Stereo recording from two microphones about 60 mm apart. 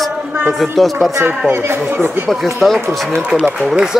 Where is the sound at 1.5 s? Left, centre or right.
Right.